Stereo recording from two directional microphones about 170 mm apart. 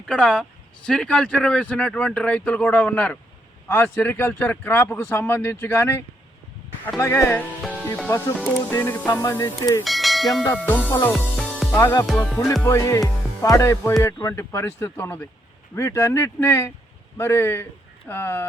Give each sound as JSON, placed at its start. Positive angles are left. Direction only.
{"t": 0.1, "sound": "speech", "side_deg": 5}
{"t": 7.0, "sound": "speech", "side_deg": 15}
{"t": 7.6, "sound": "music", "side_deg": -5}
{"t": 8.0, "sound": "speech", "side_deg": 10}
{"t": 9.8, "sound": "bell", "side_deg": 0}
{"t": 10.7, "sound": "speech", "side_deg": 10}
{"t": 11.1, "sound": "music", "side_deg": 0}
{"t": 11.8, "sound": "music", "side_deg": 20}
{"t": 12.0, "sound": "speech", "side_deg": 5}